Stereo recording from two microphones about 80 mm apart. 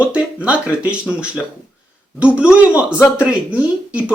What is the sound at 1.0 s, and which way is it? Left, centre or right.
Speech, centre.